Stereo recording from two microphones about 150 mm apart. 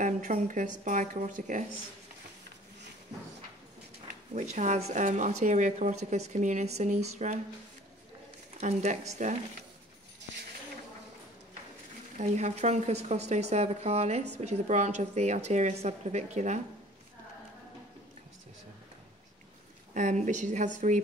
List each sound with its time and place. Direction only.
0.0 s speech: 60° right (ahead or behind)
4.3 s a woman's voice: 50° right (ahead or behind)
8.5 s a woman's voice: 50° right (ahead or behind)
12.2 s a woman's voice: 50° right (ahead or behind)
19.9 s speech: 55° right (ahead or behind)